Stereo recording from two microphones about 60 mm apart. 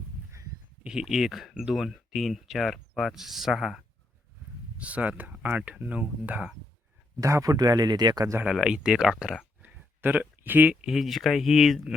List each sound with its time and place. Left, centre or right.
0.9 s speech: centre
4.8 s speech: right
7.2 s speech: right
8.6 s speech: centre
9.6 s a sound: right
10.8 s speech: centre